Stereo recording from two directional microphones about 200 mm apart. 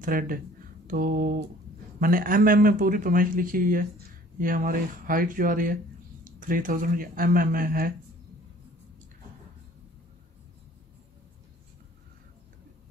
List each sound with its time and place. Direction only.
0.0 s speech: 45° right (ahead or behind)